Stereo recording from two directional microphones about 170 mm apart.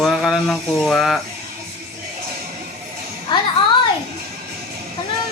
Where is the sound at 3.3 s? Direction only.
25° left (ahead or behind).